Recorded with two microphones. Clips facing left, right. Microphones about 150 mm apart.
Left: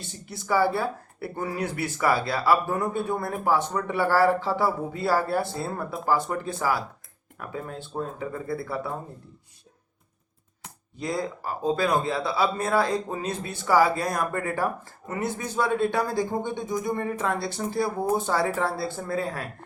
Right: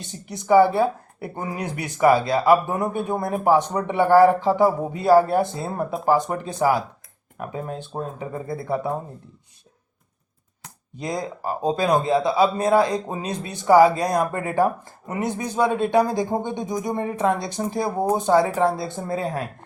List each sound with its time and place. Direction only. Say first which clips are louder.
0.1 s speech: right 9 dB; 20° right (ahead or behind)
10.9 s speech: right 1 dB; 20° right (ahead or behind)